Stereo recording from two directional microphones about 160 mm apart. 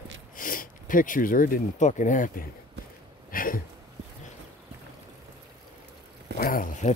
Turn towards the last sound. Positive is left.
turn(degrees=55)  # may be behind; listen again after turning